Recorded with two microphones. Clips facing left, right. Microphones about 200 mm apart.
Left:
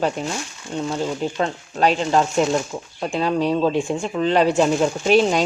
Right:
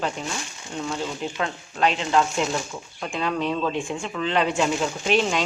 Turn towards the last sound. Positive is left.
turn(degrees=40)  # may be behind; listen again after turning